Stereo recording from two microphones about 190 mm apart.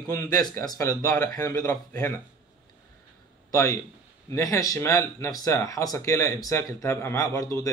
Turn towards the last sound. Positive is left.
turn(degrees=15)  # may be behind; listen again after turning